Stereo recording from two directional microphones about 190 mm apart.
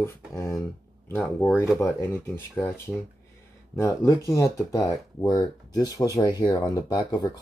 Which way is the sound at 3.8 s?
15° left (ahead or behind).